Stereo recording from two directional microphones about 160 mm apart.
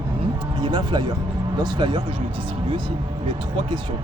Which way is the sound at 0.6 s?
30° right (ahead or behind).